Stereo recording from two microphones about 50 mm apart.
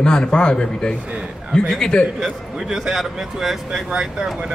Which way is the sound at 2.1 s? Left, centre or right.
Centre.